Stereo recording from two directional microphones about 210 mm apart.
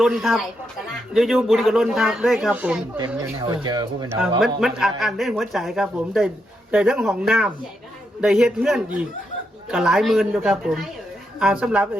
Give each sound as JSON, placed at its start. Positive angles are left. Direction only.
{"t": 0.0, "sound": "a man's voice", "side_deg": 0}
{"t": 3.5, "sound": "speech", "side_deg": -20}
{"t": 4.4, "sound": "a man's voice", "side_deg": 0}